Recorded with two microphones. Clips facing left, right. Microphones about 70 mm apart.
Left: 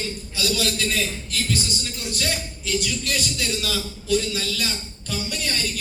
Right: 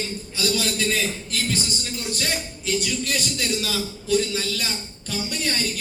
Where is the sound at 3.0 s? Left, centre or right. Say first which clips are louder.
Right 1 dB; right.